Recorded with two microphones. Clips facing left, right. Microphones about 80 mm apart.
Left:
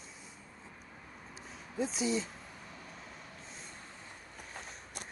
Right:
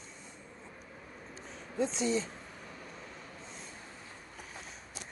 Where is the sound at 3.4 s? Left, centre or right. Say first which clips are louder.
Right 2 dB; centre.